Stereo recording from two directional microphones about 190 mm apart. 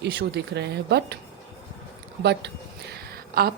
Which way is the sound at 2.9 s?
55° right (ahead or behind).